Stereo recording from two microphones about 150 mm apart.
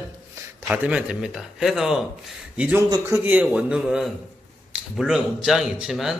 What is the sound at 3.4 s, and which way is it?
A man's voice, 5° right (ahead or behind).